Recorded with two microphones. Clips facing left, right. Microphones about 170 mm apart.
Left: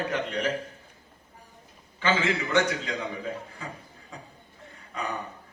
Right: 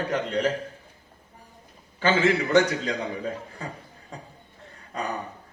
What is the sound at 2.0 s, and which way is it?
Speech, 35° right (ahead or behind).